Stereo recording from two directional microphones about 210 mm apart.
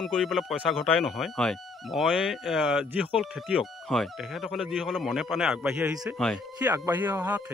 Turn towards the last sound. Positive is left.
turn(degrees=-10)  # may be behind; listen again after turning